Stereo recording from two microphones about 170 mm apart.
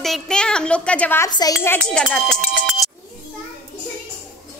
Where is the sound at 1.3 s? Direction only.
25° left (ahead or behind).